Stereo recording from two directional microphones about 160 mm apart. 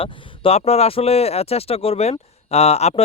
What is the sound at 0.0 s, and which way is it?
Speech, 40° left (ahead or behind).